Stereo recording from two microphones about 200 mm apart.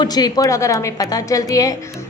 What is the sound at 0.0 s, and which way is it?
A woman's voice, 20° left (ahead or behind).